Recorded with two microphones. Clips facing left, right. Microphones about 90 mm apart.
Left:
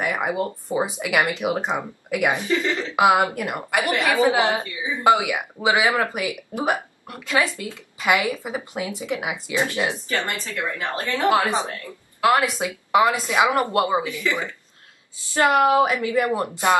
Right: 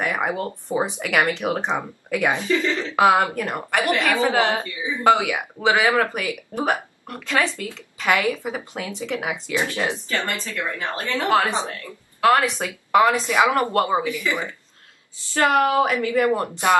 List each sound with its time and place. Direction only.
0.0 s a woman's voice: 5° left (ahead or behind)
14.2 s speech: 20° right (ahead or behind)
15.3 s a woman's voice: 20° left (ahead or behind)